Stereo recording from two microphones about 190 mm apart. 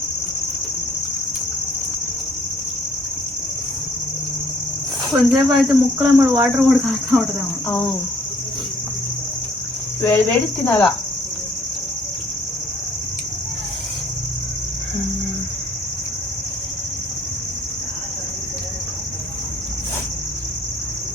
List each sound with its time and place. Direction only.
5.3 s speech: centre (ahead or behind)
6.1 s speech: 15° right (ahead or behind)
6.4 s speech: centre (ahead or behind)
10.0 s speech: 10° left (ahead or behind)